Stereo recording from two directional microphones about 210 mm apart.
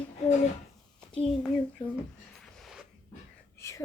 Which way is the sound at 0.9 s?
5° left (ahead or behind).